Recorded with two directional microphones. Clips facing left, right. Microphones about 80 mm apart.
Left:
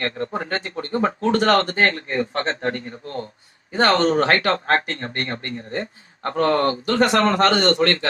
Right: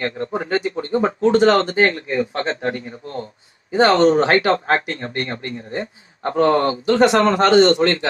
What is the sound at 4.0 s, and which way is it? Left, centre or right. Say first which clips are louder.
Speech: right 4 dB; right.